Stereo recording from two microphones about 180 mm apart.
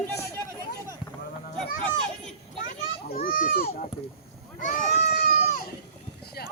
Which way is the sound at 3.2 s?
55° left (ahead or behind).